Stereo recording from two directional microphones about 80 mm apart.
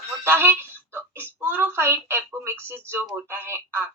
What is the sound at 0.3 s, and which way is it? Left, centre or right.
Speech, right.